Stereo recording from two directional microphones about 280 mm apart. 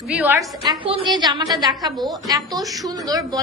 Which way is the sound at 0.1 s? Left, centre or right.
Centre.